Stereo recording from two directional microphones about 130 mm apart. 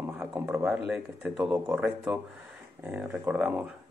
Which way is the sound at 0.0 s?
15° right (ahead or behind).